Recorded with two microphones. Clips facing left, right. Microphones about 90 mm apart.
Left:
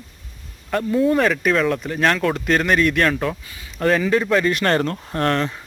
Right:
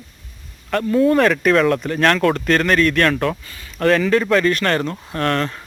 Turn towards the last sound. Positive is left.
turn(degrees=15)  # may be behind; listen again after turning